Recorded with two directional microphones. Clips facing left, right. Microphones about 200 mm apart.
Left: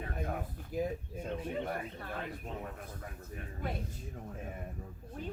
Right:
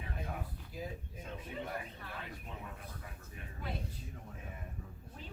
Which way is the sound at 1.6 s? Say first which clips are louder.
Left 5 dB; 45° left (ahead or behind).